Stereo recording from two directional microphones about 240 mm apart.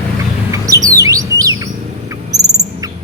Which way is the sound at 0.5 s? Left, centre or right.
Centre.